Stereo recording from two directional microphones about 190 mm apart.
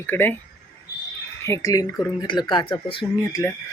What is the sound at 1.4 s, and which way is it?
Speech, 15° left (ahead or behind).